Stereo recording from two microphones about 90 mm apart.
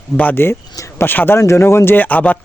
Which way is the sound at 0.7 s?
35° left (ahead or behind).